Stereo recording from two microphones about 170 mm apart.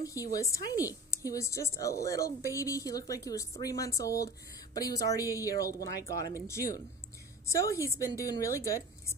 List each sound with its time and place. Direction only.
0.0 s a woman's voice: 20° left (ahead or behind)
5.9 s speech: 65° right (ahead or behind)
6.4 s a woman's voice: 15° left (ahead or behind)